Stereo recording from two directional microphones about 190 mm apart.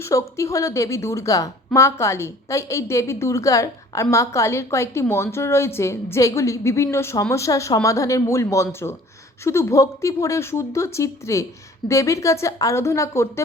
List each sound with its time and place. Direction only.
0.0 s a woman's voice: 15° left (ahead or behind)